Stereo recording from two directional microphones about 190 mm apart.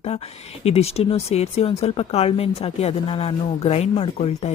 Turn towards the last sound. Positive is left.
turn(degrees=35)  # may be behind; listen again after turning